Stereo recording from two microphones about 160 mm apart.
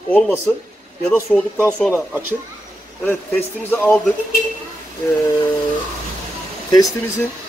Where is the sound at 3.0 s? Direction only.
10° left (ahead or behind).